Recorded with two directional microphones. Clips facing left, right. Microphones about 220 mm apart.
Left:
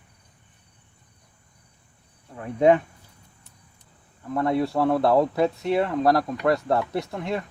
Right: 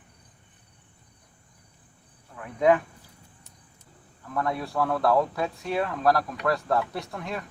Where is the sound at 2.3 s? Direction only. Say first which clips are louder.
Left 3 dB; 25° left (ahead or behind).